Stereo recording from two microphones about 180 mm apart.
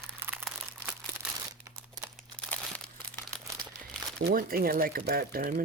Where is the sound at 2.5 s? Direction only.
10° left (ahead or behind).